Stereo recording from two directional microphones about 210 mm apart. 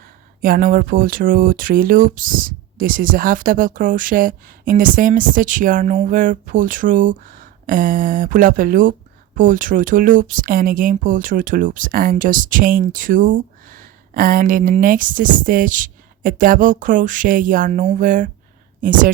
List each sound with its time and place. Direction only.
0.4 s speech: 40° right (ahead or behind)